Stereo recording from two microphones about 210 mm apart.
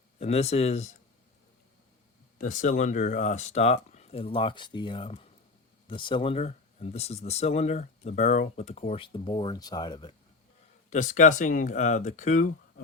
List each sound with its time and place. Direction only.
0.2 s speech: 30° left (ahead or behind)
2.4 s speech: 40° left (ahead or behind); by 10.2 s 20° left (ahead or behind)
10.8 s speech: 35° left (ahead or behind)